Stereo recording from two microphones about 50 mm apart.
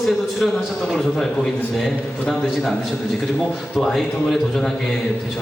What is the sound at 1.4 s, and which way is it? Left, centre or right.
A man's voice, centre.